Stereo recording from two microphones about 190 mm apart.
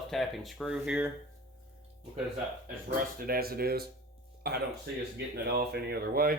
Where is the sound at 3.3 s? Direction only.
50° right (ahead or behind).